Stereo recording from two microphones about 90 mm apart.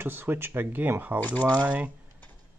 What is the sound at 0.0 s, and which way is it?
Speech, 25° right (ahead or behind).